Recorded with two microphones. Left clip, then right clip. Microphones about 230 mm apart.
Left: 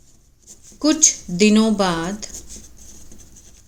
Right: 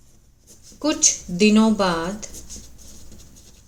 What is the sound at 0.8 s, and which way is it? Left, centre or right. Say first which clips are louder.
A woman's voice: left 3 dB; left.